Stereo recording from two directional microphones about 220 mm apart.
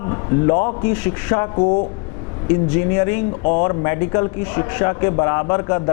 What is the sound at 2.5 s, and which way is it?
Speech, 15° left (ahead or behind).